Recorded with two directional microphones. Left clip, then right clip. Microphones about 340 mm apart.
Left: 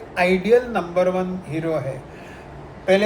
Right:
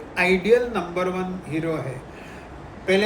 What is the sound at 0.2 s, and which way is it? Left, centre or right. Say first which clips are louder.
Speech: left 1 dB; centre.